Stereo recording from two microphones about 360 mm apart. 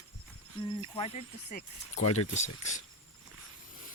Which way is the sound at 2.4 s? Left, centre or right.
Centre.